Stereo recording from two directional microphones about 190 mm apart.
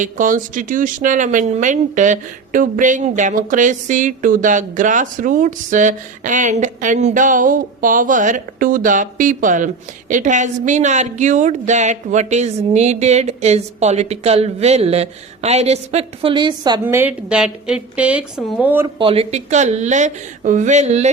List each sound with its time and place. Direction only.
0.0 s a woman's voice: 45° right (ahead or behind); by 16.8 s 25° right (ahead or behind)
16.8 s speech: 10° right (ahead or behind)
18.9 s a woman's voice: 30° right (ahead or behind)